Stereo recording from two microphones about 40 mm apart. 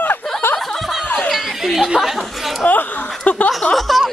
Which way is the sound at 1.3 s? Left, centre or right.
Centre.